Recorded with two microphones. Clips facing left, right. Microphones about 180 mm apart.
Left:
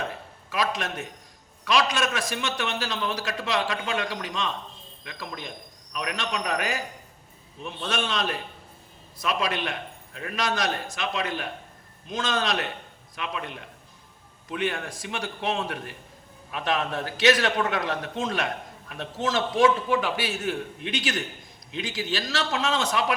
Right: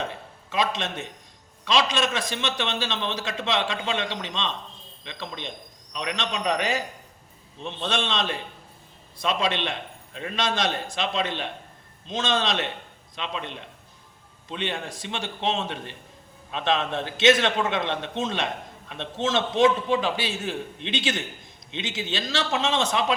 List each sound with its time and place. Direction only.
0.5 s a man's voice: 25° right (ahead or behind)